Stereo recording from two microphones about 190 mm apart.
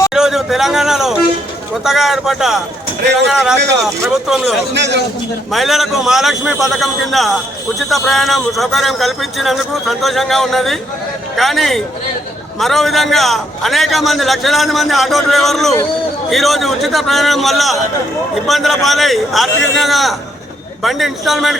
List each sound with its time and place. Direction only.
0.1 s a man's voice: centre (ahead or behind)
4.7 s a man's voice: 65° right (ahead or behind)
5.5 s a man's voice: centre (ahead or behind)